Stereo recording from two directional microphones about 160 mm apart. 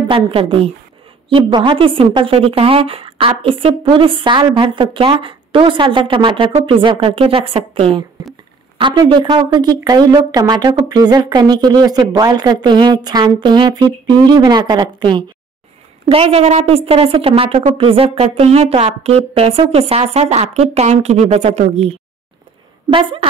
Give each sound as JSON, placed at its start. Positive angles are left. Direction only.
{"t": 0.1, "sound": "a woman's voice", "side_deg": -35}